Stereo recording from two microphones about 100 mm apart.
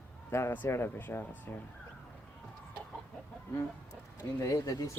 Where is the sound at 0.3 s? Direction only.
25° left (ahead or behind).